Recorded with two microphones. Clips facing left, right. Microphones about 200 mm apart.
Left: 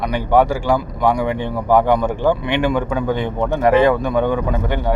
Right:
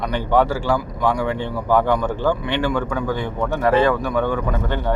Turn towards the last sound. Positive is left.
turn(degrees=15)  # may be behind; listen again after turning